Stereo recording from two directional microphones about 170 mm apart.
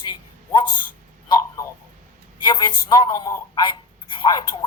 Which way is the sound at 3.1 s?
20° left (ahead or behind).